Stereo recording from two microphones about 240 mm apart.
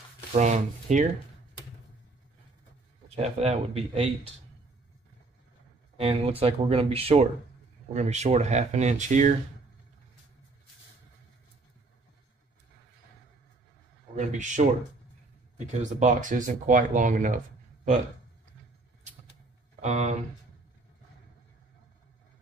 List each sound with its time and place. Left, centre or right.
0.3 s speech: right
3.2 s speech: right
5.9 s speech: right
14.1 s speech: right
19.8 s speech: right